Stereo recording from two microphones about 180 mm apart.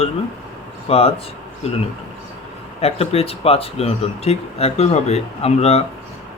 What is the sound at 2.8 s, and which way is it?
Speech, 35° left (ahead or behind).